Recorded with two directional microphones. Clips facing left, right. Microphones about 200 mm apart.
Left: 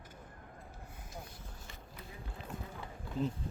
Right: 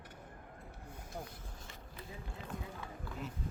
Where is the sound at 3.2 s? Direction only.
30° left (ahead or behind).